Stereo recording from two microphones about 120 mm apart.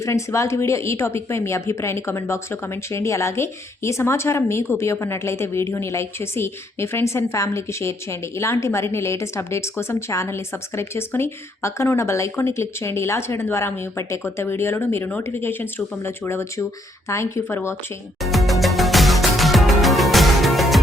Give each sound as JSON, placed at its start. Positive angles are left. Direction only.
{"t": 0.0, "sound": "a woman's voice", "side_deg": 25}
{"t": 18.2, "sound": "music", "side_deg": 0}